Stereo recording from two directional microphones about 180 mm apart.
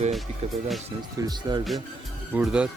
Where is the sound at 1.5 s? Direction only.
25° right (ahead or behind).